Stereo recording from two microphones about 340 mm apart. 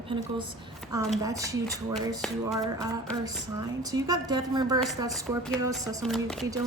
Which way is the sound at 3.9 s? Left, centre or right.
Centre.